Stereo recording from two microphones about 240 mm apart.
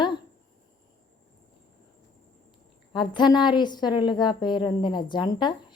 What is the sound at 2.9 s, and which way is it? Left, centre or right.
A woman's voice, centre.